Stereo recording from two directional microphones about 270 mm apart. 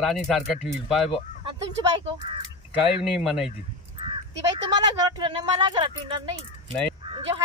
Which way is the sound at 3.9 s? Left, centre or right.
Centre.